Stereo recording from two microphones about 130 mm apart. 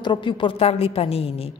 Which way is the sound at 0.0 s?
40° left (ahead or behind).